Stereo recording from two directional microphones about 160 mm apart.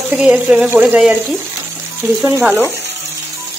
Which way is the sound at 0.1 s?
5° right (ahead or behind).